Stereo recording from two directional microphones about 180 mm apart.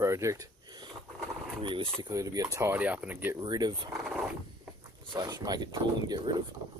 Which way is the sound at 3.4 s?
25° right (ahead or behind).